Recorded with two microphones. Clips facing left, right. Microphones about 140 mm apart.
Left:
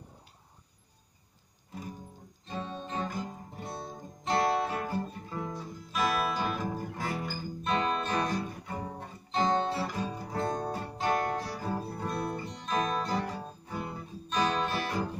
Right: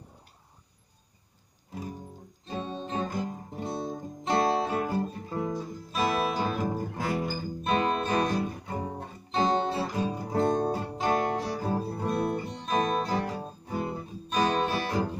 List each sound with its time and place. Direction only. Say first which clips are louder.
2.5 s guitar: right 3 dB; 25° right (ahead or behind)
10.1 s music: right 7 dB; 25° right (ahead or behind)
14.5 s guitar: right 4 dB; 25° right (ahead or behind)